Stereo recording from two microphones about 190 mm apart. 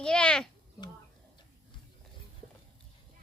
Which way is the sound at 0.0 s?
5° left (ahead or behind).